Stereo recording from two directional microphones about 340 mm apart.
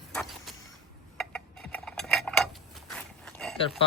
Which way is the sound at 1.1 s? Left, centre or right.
Centre.